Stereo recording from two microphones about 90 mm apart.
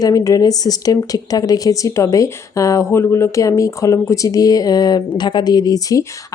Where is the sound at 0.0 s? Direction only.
40° left (ahead or behind).